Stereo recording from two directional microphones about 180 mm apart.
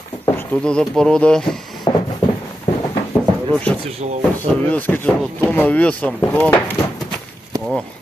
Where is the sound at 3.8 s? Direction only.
35° right (ahead or behind).